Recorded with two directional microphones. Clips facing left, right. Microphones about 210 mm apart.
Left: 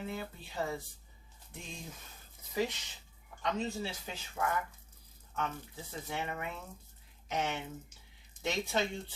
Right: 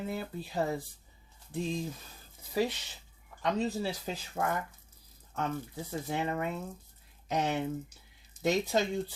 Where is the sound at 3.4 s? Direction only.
35° right (ahead or behind).